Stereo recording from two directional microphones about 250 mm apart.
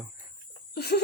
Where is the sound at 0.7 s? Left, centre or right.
Left.